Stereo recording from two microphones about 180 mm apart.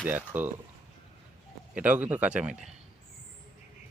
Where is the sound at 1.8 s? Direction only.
10° right (ahead or behind).